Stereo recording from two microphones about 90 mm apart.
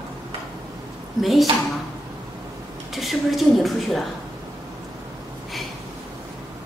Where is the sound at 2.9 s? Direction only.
Centre (ahead or behind).